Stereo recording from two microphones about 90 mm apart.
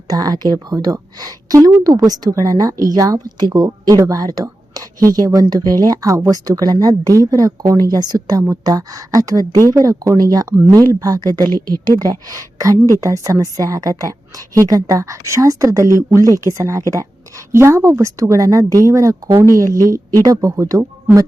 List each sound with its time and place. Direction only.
0.1 s a woman's voice: 45° right (ahead or behind)